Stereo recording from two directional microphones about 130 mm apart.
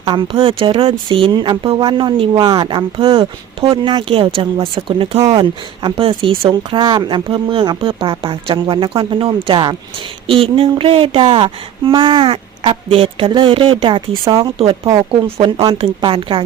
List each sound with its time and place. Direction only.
0.0 s speech: 35° right (ahead or behind)